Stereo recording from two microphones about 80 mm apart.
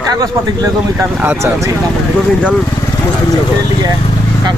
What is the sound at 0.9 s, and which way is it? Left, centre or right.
Speech, right.